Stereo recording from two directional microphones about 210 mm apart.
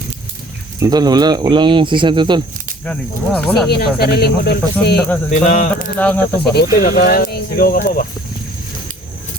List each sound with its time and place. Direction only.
0.8 s speech: 20° right (ahead or behind)
2.8 s speech: 5° left (ahead or behind)
3.7 s speech: 50° left (ahead or behind)
4.9 s speech: 5° left (ahead or behind)
5.3 s speech: 40° left (ahead or behind)
6.0 s speech: 5° left (ahead or behind)
6.7 s speech: 45° left (ahead or behind)